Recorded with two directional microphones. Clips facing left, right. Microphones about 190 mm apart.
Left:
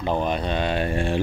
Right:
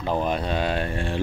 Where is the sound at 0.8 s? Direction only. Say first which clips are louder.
Left 4 dB; 15° left (ahead or behind).